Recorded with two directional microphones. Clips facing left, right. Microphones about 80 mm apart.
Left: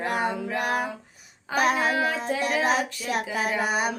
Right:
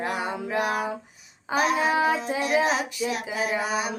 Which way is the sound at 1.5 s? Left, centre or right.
Left.